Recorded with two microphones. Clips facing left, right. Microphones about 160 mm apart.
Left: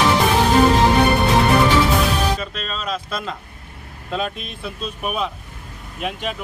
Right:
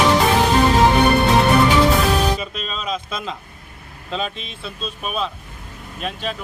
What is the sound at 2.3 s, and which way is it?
Music, 5° right (ahead or behind).